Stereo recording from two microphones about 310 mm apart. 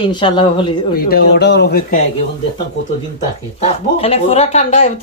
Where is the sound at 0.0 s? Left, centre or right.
Centre.